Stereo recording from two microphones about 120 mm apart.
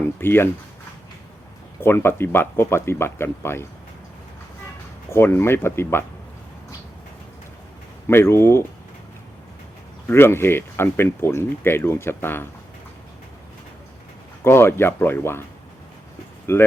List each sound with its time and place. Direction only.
0.2 s speech: 20° left (ahead or behind)
1.8 s speech: 20° left (ahead or behind)
5.0 s speech: 20° left (ahead or behind)
8.0 s speech: 20° left (ahead or behind)
10.1 s speech: 20° left (ahead or behind)
14.4 s speech: 20° left (ahead or behind)
16.5 s speech: 20° left (ahead or behind)